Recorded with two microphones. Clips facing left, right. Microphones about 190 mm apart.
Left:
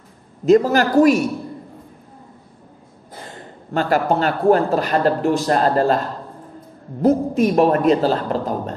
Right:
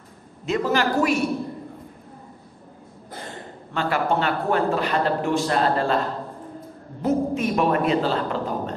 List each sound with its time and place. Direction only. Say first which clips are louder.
0.5 s speech: left 8 dB; 40° left (ahead or behind)
3.7 s speech: left 5 dB; 40° left (ahead or behind)
7.0 s speech: left 6 dB; 40° left (ahead or behind)